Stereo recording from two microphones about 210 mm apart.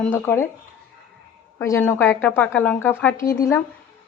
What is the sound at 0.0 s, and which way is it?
Speech, 10° left (ahead or behind).